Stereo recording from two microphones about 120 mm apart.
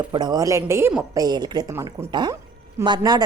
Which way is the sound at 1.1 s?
35° right (ahead or behind).